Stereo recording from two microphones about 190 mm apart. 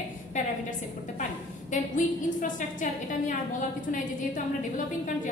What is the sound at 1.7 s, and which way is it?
A woman's voice, 40° left (ahead or behind).